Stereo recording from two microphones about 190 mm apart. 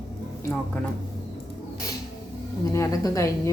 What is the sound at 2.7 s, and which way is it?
Speech, 15° left (ahead or behind).